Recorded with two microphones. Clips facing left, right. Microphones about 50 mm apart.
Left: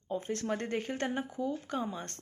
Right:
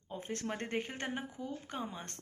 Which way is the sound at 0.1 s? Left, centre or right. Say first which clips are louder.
Left 6 dB; right.